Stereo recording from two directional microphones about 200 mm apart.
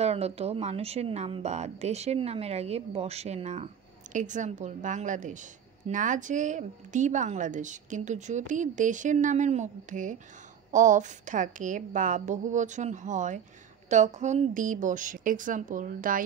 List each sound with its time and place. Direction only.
0.0 s a woman's voice: 30° right (ahead or behind)